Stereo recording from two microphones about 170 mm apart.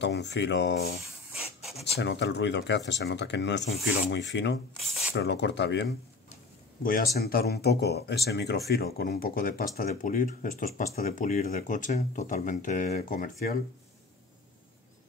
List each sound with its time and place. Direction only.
0.0 s speech: 90° left
1.3 s rub: centre (ahead or behind)
2.0 s speech: 90° left
6.8 s speech: 55° left (ahead or behind)